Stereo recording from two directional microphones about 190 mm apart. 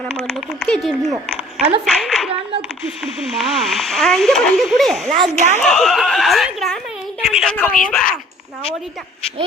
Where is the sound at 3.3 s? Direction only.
Centre (ahead or behind).